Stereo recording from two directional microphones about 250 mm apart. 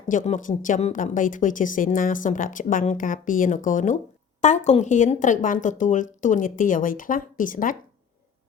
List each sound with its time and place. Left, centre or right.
0.1 s speech: left